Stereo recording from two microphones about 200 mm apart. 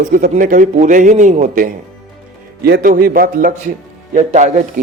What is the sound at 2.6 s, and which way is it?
A man's voice, 50° right (ahead or behind).